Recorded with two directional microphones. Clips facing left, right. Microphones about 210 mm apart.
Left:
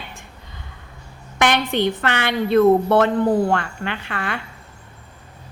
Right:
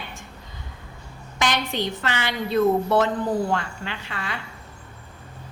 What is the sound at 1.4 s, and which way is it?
A woman's voice, 60° left (ahead or behind).